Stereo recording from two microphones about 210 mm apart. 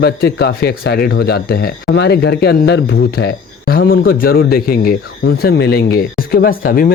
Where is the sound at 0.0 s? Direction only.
50° left (ahead or behind).